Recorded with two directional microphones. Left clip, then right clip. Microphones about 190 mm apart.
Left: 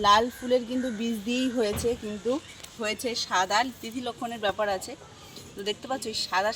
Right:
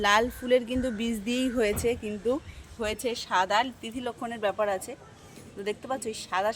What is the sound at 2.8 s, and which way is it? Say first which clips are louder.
A woman's voice: left 1 dB; 10° left (ahead or behind).